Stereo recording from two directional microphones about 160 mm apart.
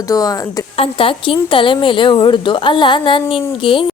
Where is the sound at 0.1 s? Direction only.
20° left (ahead or behind).